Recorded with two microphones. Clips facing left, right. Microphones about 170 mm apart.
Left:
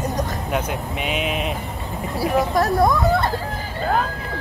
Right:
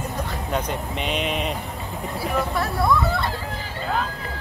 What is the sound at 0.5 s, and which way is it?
Speech, 5° left (ahead or behind).